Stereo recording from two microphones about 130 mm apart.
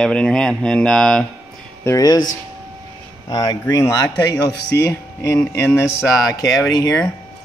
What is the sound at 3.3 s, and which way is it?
Speech, 30° left (ahead or behind).